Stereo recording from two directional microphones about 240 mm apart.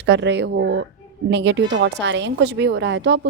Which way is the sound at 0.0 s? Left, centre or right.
Right.